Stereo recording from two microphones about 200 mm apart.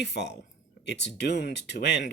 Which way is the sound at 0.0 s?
55° left (ahead or behind).